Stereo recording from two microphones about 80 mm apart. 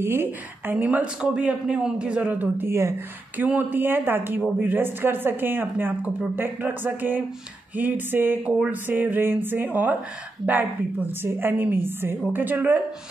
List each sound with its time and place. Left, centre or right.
0.0 s speech: right